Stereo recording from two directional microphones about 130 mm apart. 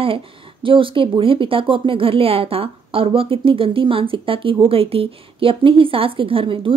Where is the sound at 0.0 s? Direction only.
45° right (ahead or behind).